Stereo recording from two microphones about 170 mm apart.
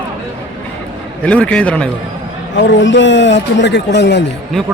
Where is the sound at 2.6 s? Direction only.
90° left.